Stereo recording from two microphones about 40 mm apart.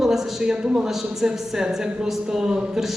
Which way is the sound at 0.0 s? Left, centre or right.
Centre.